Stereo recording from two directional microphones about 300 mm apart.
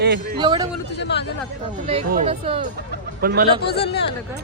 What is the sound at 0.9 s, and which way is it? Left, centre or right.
Speech, left.